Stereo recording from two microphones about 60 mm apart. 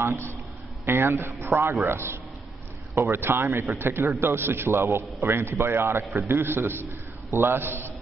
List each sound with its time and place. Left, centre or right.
0.0 s a man's voice: right